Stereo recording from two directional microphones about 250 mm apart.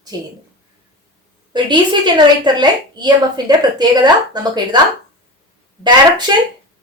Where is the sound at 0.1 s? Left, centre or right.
Centre.